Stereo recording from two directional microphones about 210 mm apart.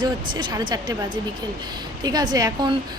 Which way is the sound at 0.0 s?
20° right (ahead or behind).